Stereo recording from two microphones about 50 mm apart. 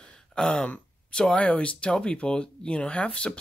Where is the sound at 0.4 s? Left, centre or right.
Centre.